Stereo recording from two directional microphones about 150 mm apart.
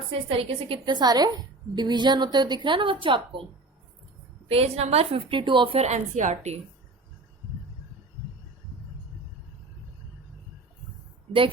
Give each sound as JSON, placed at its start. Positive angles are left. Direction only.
{"t": 0.3, "sound": "a woman's voice", "side_deg": -40}
{"t": 4.4, "sound": "a woman's voice", "side_deg": -45}
{"t": 11.3, "sound": "a woman's voice", "side_deg": -35}